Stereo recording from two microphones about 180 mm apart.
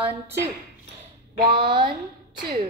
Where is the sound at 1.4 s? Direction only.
25° right (ahead or behind).